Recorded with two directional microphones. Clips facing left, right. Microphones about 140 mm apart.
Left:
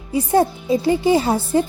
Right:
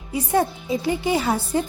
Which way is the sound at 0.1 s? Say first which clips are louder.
Left 4 dB; 35° left (ahead or behind).